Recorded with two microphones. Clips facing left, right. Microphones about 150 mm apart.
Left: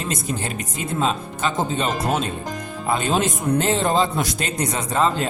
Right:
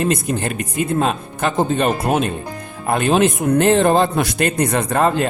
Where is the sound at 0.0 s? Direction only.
60° right (ahead or behind).